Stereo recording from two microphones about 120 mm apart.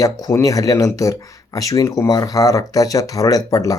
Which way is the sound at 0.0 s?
25° left (ahead or behind).